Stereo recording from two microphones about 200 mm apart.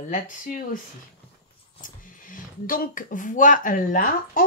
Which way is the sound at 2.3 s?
45° left (ahead or behind).